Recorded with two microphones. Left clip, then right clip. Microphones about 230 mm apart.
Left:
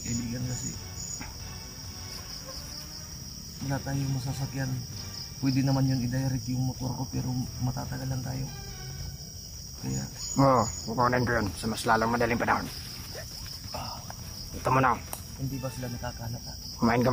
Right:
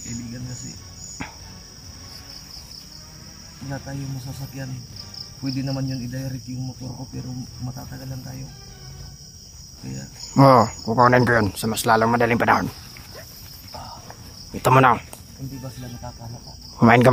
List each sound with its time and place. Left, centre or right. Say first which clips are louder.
3.6 s cricket: even; centre
7.7 s cricket: left 1 dB; centre
10.3 s speech: right 9 dB; right
14.6 s speech: right 9 dB; right
16.8 s speech: right 11 dB; right